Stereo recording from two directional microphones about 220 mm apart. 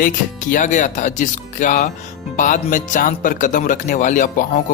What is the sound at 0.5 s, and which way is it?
Speech, 35° left (ahead or behind).